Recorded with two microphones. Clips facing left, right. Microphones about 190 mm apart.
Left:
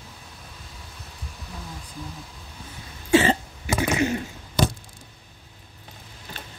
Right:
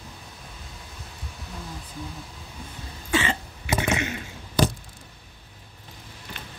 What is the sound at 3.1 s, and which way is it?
Cough, 35° left (ahead or behind).